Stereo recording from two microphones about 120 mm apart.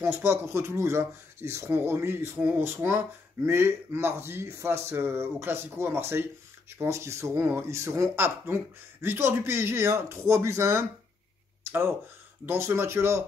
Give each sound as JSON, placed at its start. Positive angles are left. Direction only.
{"t": 0.0, "sound": "speech", "side_deg": -20}
{"t": 11.6, "sound": "a sound", "side_deg": -20}
{"t": 12.4, "sound": "speech", "side_deg": -20}